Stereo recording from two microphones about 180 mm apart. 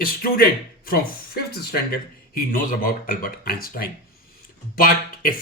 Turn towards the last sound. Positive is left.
turn(degrees=50)  # may be behind; listen again after turning